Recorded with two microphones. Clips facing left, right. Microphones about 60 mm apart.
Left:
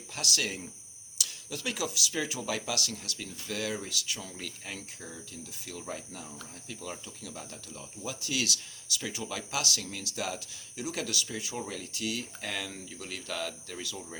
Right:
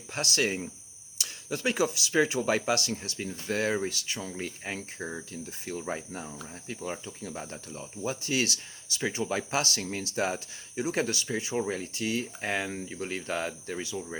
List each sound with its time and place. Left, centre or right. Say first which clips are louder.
0.1 s speech: right 5 dB; right